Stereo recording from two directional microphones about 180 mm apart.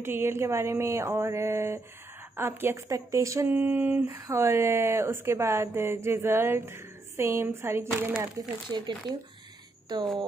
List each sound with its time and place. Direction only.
0.0 s speech: 15° right (ahead or behind)